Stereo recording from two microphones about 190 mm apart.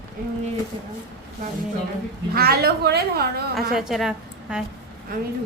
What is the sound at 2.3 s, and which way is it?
A woman's voice, 55° right (ahead or behind).